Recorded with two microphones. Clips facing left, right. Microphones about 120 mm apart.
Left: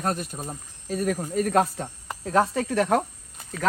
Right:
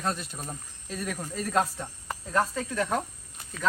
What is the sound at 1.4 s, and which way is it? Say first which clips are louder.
Speech: left 5 dB; 55° left (ahead or behind).